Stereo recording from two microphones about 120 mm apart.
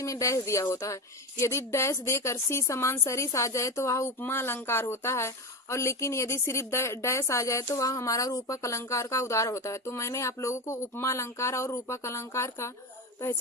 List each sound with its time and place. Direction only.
0.0 s a woman's voice: 25° left (ahead or behind)